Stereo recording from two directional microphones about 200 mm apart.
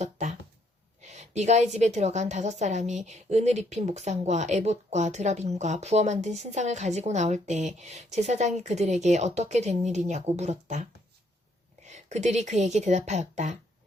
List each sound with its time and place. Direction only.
0.0 s a sound: 35° right (ahead or behind)
1.0 s a woman's voice: 35° right (ahead or behind)
11.9 s a woman's voice: 35° right (ahead or behind)